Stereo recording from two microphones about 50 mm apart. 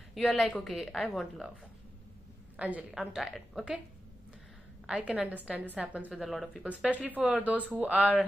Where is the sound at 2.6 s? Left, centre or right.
Right.